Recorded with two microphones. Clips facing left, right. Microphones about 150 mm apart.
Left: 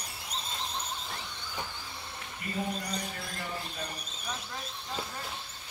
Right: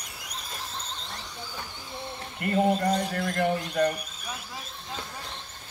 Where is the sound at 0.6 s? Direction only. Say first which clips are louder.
Left 1 dB; 15° left (ahead or behind).